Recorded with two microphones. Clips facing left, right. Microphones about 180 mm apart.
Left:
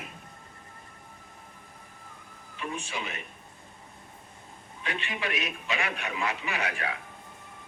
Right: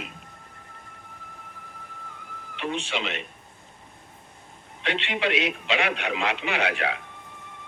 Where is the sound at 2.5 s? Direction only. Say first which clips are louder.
Right 6 dB; 80° right.